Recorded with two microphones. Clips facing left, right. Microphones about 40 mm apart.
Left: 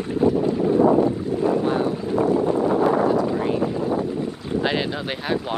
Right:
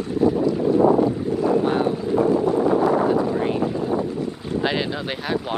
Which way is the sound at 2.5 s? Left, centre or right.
Left.